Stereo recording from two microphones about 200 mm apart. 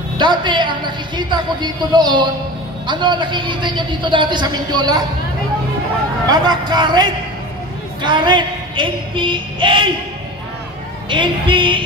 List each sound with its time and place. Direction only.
0.2 s a man's voice: 25° right (ahead or behind)
6.3 s a man's voice: 20° right (ahead or behind)
11.1 s a man's voice: 25° right (ahead or behind)